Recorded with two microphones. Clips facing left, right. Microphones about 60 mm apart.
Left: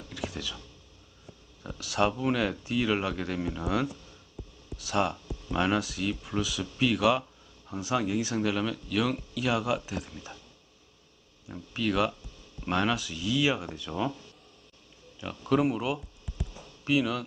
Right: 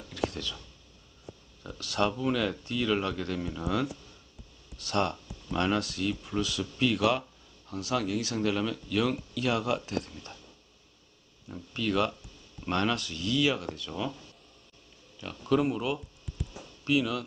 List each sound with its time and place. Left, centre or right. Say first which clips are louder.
0.1 s a sound: right 4 dB; centre
1.6 s speech: left 2 dB; centre
7.7 s speech: left 1 dB; centre
11.4 s speech: left 1 dB; centre
15.2 s speech: left 1 dB; centre
16.2 s a sound: even; centre